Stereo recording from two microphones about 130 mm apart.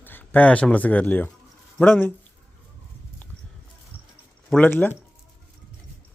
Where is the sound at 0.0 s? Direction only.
15° left (ahead or behind).